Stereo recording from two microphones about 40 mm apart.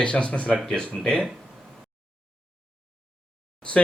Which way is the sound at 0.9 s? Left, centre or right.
Centre.